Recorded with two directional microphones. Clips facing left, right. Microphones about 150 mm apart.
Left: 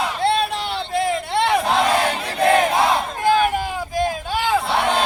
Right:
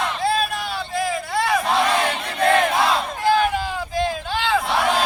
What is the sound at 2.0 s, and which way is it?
Crowd, 30° left (ahead or behind).